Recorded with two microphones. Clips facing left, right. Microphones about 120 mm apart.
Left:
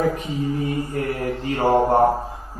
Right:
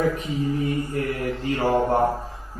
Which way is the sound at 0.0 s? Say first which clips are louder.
Left 1 dB; 40° left (ahead or behind).